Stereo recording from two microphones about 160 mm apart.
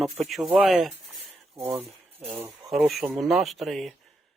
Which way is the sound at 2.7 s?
Centre (ahead or behind).